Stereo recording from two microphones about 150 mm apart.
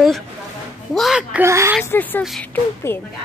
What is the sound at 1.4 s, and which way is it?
Speech, 20° right (ahead or behind).